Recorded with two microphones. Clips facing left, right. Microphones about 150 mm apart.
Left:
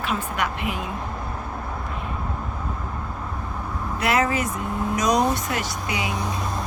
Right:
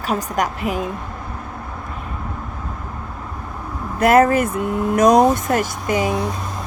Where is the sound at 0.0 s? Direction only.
40° right (ahead or behind).